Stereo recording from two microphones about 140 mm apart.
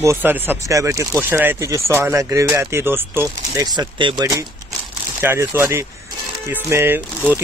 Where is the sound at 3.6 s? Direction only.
35° right (ahead or behind); by 7.0 s 15° right (ahead or behind).